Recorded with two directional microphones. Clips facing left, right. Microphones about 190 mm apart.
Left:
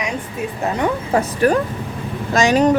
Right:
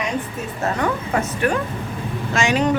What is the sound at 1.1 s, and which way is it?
A woman's voice, 35° left (ahead or behind).